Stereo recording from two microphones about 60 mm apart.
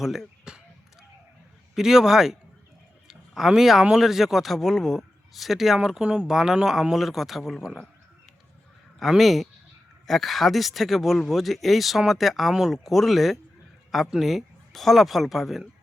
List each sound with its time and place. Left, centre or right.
0.0 s a man's voice: centre
0.5 s basketball bounce: centre
1.7 s a man's voice: centre
9.0 s a man's voice: centre